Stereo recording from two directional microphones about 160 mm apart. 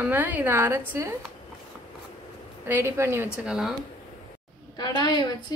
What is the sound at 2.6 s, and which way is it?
Speech, 15° right (ahead or behind).